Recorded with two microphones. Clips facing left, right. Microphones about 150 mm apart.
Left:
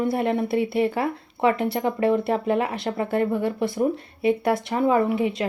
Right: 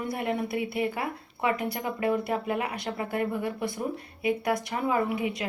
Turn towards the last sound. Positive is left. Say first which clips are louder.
# left 6 dB
turn(degrees=30)  # may be behind; listen again after turning